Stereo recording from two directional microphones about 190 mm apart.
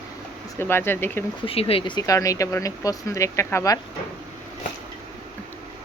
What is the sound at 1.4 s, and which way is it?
Speech, 30° left (ahead or behind).